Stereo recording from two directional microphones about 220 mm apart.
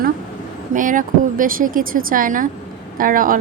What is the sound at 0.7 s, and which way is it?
A woman's voice, 35° right (ahead or behind).